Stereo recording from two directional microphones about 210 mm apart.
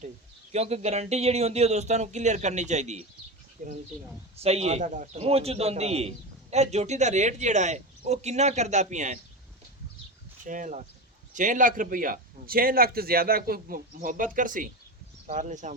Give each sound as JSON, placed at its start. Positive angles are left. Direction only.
{"t": 0.5, "sound": "a man's voice", "side_deg": -30}
{"t": 10.4, "sound": "a man's voice", "side_deg": -35}